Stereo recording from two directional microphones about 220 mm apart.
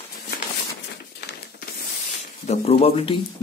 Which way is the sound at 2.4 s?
30° left (ahead or behind).